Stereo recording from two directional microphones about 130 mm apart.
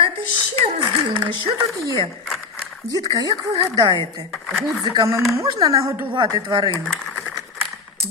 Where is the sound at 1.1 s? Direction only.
50° right (ahead or behind).